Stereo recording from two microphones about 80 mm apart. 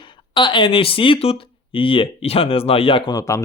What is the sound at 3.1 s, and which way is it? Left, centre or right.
Speech, left.